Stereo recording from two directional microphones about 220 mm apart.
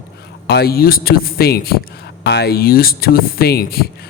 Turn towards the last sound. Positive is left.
turn(degrees=45)  # may be behind; listen again after turning